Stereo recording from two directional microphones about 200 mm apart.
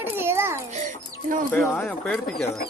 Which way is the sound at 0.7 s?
35° right (ahead or behind).